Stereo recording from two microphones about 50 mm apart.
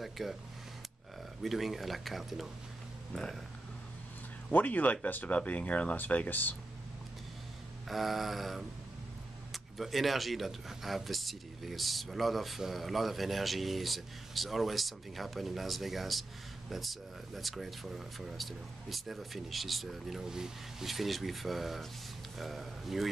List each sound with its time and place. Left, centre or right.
0.0 s speech: centre
1.4 s speech: centre
3.1 s speech: centre
4.5 s speech: left
7.9 s speech: centre